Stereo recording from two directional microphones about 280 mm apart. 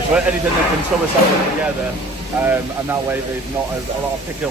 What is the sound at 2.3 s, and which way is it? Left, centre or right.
Speech, centre.